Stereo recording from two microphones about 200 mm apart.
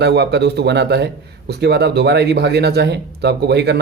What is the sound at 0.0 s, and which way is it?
Speech, 55° right (ahead or behind).